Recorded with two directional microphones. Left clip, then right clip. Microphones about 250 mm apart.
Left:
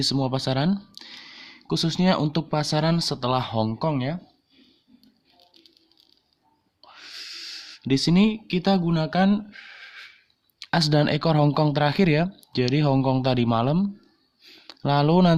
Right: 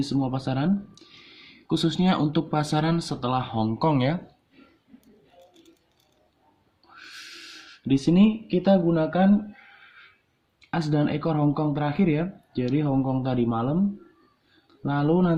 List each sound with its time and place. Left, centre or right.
0.0 s speech: left
3.8 s speech: centre
6.8 s a sound: centre; by 9.3 s left
10.6 s speech: left
14.7 s speech: left